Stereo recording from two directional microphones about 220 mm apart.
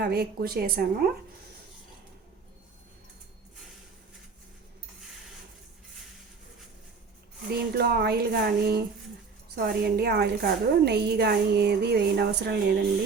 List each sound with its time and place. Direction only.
0.0 s a woman's voice: 45° right (ahead or behind)
7.7 s a woman's voice: 45° right (ahead or behind)